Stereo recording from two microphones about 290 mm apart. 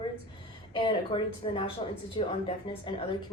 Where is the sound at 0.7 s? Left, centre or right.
Centre.